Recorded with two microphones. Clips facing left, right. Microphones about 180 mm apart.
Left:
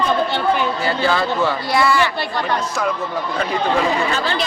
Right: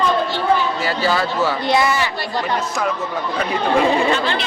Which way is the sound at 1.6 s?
20° right (ahead or behind).